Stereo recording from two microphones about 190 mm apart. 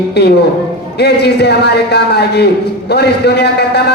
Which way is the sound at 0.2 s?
60° left (ahead or behind).